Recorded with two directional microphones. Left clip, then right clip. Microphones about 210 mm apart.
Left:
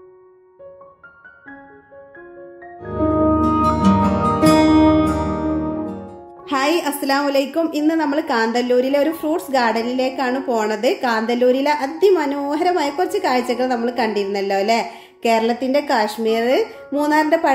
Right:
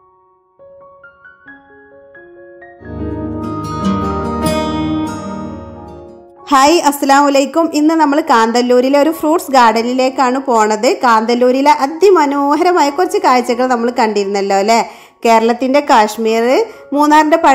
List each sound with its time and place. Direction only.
3.4 s music: centre (ahead or behind)
6.4 s a woman's voice: 40° right (ahead or behind)